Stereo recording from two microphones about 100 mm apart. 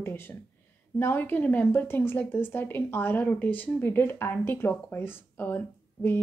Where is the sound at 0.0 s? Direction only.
20° left (ahead or behind).